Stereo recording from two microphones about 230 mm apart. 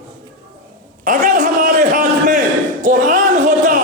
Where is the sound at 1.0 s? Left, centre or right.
Right.